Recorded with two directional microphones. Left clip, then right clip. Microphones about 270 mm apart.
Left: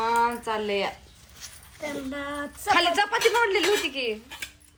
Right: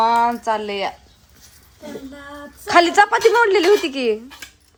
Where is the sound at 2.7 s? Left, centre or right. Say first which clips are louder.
Right 9 dB; centre.